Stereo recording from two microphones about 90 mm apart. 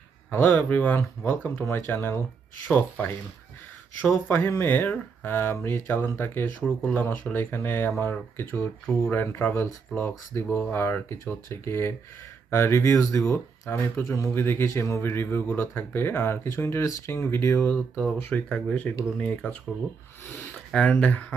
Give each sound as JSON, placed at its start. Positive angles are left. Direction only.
{"t": 0.3, "sound": "speech", "side_deg": 25}
{"t": 4.3, "sound": "speech", "side_deg": 25}
{"t": 18.2, "sound": "speech", "side_deg": 20}
{"t": 20.7, "sound": "speech", "side_deg": 15}